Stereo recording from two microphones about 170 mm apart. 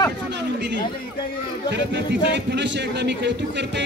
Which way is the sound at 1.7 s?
90° right.